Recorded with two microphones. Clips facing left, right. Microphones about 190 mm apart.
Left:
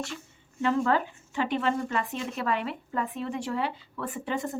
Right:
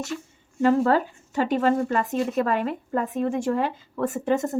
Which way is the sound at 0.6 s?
40° right (ahead or behind).